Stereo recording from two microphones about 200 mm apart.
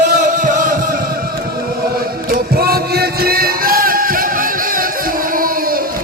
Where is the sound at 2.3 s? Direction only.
50° right (ahead or behind).